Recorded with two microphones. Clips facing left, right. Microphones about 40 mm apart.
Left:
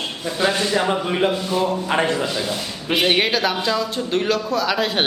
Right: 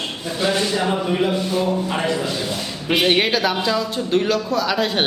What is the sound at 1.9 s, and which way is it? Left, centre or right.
Speech, left.